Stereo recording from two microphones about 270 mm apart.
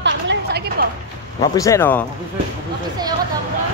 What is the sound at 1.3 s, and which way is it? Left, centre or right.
Speech, centre.